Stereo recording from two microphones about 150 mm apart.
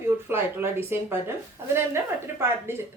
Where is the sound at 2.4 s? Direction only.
15° right (ahead or behind).